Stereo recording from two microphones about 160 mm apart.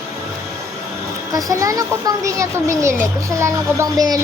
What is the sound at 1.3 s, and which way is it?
A woman's voice, 20° right (ahead or behind).